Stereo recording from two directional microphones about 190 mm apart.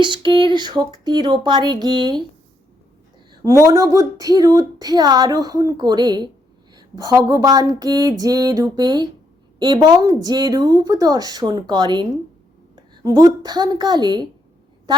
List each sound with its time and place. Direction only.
0.0 s speech: 25° right (ahead or behind)
3.7 s a woman's voice: 15° right (ahead or behind)